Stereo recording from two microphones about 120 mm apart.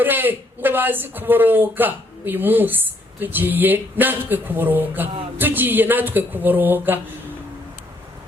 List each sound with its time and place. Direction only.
0.0 s speech: 15° right (ahead or behind)